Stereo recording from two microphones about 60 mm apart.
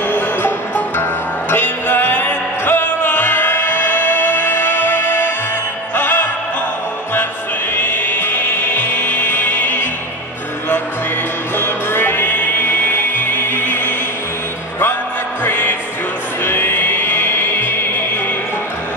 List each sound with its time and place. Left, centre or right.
0.1 s music: left
7.7 s music: left
11.5 s music: left
15.4 s music: left